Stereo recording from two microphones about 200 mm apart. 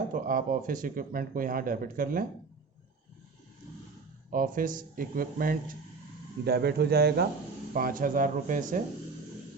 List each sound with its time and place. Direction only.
0.1 s speech: 40° right (ahead or behind)
4.3 s speech: 45° right (ahead or behind)